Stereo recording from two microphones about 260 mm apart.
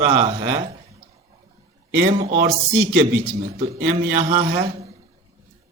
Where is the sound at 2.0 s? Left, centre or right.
Right.